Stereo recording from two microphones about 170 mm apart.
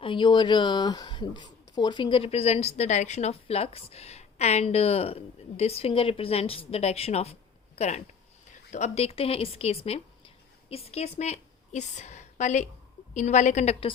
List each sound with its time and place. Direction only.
0.0 s a woman's voice: 30° left (ahead or behind)